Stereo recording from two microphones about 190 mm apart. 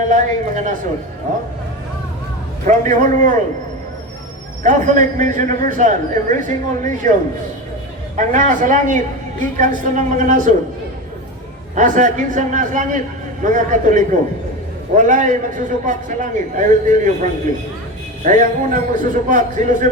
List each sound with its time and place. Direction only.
0.1 s a man's voice: 40° right (ahead or behind)
2.6 s a man's voice: 40° right (ahead or behind)
4.6 s a man's voice: 40° right (ahead or behind)
8.1 s a man's voice: 40° right (ahead or behind)
11.7 s a man's voice: 40° right (ahead or behind)
18.2 s a man's voice: 45° right (ahead or behind)